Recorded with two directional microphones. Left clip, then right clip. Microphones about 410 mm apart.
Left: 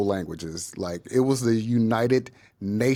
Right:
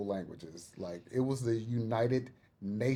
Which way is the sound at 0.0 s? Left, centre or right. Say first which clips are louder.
Left 12 dB; left.